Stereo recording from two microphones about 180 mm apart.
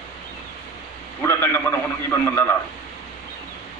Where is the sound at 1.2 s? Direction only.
15° left (ahead or behind).